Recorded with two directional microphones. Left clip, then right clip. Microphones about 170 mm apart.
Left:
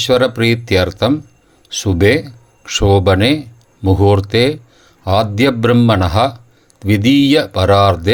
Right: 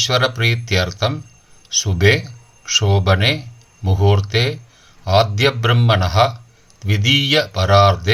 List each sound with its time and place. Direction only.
0.0 s speech: 45° left (ahead or behind)